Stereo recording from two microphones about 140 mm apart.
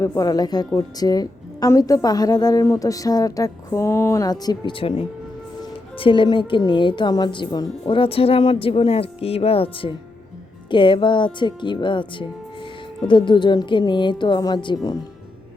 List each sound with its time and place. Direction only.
0.0 s a woman's voice: 25° left (ahead or behind)